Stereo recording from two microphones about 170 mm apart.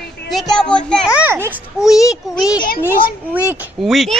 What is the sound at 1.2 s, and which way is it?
Speech, 10° right (ahead or behind).